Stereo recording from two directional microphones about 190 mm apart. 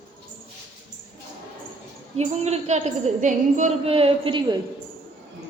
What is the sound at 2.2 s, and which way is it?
A woman's voice, 35° right (ahead or behind).